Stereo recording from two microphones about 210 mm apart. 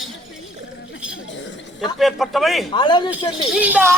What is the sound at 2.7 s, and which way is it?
Speech, 20° left (ahead or behind).